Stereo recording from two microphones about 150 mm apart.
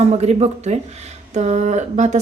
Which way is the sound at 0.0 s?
45° right (ahead or behind).